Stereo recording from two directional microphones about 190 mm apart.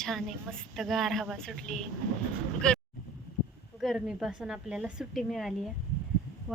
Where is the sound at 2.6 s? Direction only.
5° left (ahead or behind).